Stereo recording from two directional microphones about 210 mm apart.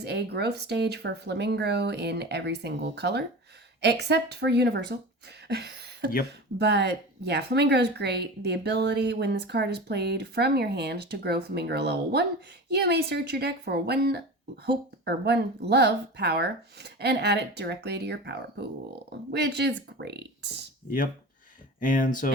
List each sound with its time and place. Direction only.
0.0 s speech: 50° right (ahead or behind)
5.5 s a sound: 50° right (ahead or behind)
6.6 s speech: 55° right (ahead or behind)
21.8 s speech: 40° left (ahead or behind)